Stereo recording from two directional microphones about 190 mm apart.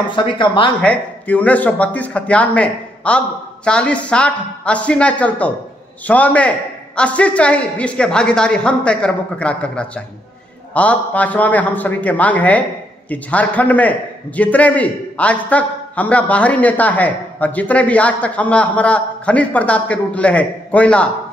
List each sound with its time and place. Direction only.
0.1 s speech: 25° left (ahead or behind)
0.7 s a man's voice: 10° left (ahead or behind)